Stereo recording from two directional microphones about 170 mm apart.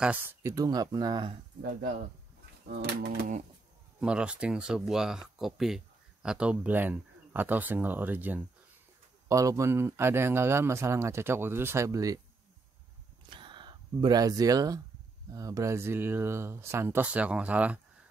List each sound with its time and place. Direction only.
0.0 s speech: 10° right (ahead or behind)
1.6 s speech: 60° right (ahead or behind)
4.0 s a man's voice: 5° right (ahead or behind)
13.3 s a sound: 30° right (ahead or behind)
15.3 s a man's voice: 20° right (ahead or behind)